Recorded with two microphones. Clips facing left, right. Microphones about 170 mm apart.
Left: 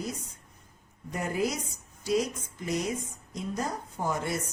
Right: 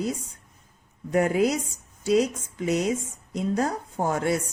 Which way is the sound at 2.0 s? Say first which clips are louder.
Right 6 dB; 70° right (ahead or behind).